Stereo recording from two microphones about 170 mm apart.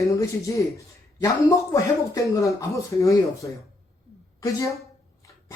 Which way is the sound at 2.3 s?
20° left (ahead or behind).